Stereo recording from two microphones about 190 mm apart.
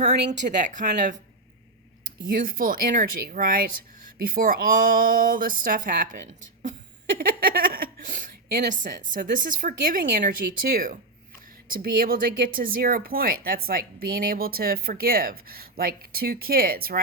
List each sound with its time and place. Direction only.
0.0 s a woman's voice: 40° right (ahead or behind)
2.3 s speech: 45° right (ahead or behind)
7.2 s a sound: 50° right (ahead or behind)
8.8 s speech: 45° right (ahead or behind)